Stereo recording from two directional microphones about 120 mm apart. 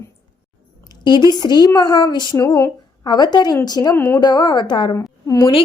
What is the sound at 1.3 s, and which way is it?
A woman's voice, 35° left (ahead or behind).